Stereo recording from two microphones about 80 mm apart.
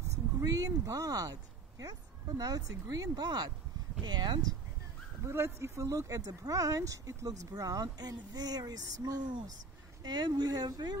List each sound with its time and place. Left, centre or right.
0.4 s speech: right
5.2 s speech: right